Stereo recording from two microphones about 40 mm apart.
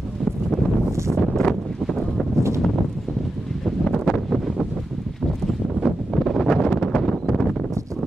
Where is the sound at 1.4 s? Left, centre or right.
Centre.